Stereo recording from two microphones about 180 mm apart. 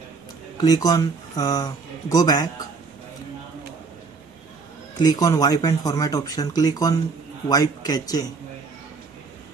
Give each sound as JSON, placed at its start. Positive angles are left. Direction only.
{"t": 0.6, "sound": "speech", "side_deg": 20}
{"t": 4.9, "sound": "speech", "side_deg": 20}